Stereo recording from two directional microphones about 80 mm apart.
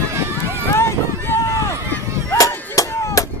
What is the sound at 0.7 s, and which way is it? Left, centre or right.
Vehicle, left.